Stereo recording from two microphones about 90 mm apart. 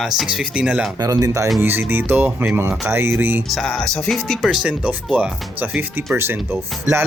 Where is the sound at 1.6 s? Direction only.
25° right (ahead or behind).